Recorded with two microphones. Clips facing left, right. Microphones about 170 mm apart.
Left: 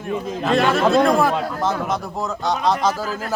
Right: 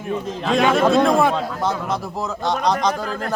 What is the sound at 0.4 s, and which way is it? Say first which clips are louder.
A man's voice: right 1 dB; centre (ahead or behind).